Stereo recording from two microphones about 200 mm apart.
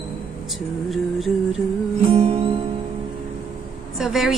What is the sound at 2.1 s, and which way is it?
Music, 30° right (ahead or behind).